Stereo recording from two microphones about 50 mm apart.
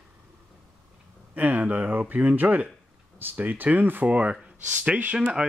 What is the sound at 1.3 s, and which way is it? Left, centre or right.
Speech, right.